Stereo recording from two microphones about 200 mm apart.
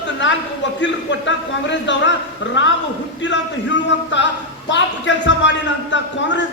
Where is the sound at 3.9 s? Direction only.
65° left (ahead or behind).